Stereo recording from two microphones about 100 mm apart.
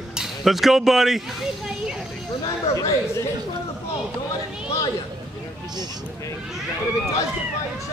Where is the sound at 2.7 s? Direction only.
30° left (ahead or behind).